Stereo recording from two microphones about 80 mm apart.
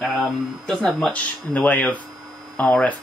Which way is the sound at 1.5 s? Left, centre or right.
Left.